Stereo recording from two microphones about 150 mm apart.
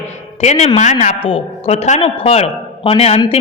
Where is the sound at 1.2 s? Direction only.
40° left (ahead or behind).